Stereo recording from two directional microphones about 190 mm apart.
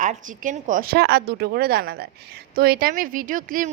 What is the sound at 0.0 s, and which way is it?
A woman's voice, 40° right (ahead or behind).